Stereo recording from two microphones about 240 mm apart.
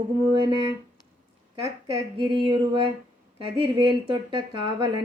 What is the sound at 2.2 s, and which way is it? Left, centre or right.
A woman's voice, right.